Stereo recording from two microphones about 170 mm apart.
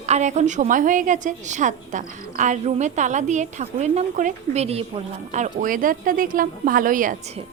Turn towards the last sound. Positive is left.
turn(degrees=-50)  # may be behind; listen again after turning